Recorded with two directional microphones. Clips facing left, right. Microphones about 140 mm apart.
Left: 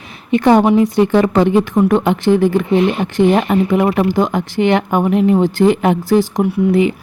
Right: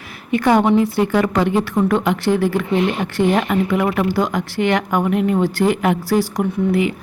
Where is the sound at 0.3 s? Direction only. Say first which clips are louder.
Left 4 dB; 25° left (ahead or behind).